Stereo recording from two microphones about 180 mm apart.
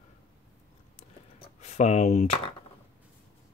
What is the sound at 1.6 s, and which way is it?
Speech, 40° left (ahead or behind).